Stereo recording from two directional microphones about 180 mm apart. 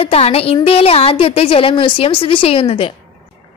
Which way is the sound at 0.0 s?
35° left (ahead or behind).